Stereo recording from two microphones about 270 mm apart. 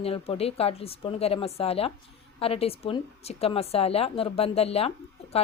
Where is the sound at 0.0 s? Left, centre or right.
Left.